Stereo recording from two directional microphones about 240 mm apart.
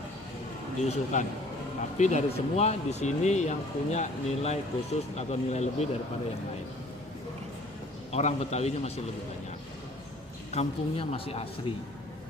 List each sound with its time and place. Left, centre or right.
0.8 s speech: left
8.1 s speech: left
10.5 s speech: left